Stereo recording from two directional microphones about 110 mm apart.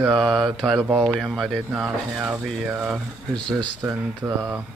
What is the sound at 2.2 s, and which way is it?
Speech, 15° right (ahead or behind).